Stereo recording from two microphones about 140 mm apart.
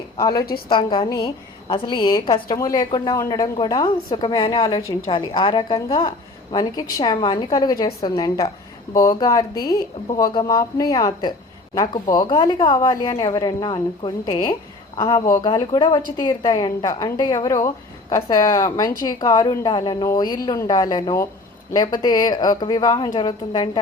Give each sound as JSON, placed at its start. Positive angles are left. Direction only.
{"t": 0.2, "sound": "speech", "side_deg": 25}
{"t": 0.7, "sound": "a woman's voice", "side_deg": 40}
{"t": 5.0, "sound": "a woman's voice", "side_deg": 40}